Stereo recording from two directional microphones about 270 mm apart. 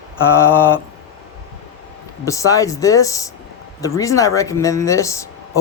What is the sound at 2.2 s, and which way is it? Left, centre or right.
Speech, centre.